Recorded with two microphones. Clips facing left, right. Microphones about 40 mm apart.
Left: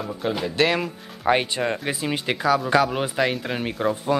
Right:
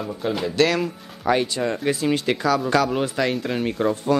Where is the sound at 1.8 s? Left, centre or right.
Centre.